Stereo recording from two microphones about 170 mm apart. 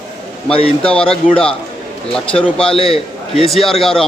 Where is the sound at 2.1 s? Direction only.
5° left (ahead or behind).